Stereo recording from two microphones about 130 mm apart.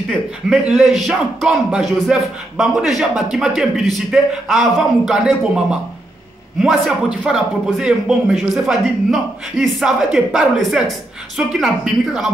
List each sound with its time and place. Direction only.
0.1 s speech: 5° right (ahead or behind)